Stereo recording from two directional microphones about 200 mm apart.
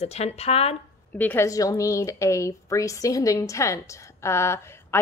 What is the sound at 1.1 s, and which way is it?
A woman's voice, 10° left (ahead or behind).